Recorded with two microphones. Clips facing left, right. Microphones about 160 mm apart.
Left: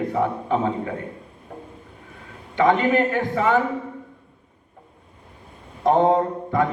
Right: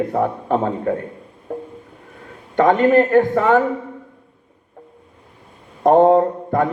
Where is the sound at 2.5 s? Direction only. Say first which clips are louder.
Right 5 dB; 45° right (ahead or behind).